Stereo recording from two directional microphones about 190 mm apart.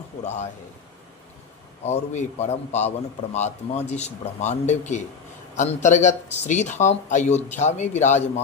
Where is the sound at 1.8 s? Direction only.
35° left (ahead or behind).